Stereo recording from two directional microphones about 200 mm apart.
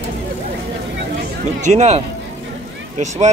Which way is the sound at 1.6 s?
35° right (ahead or behind).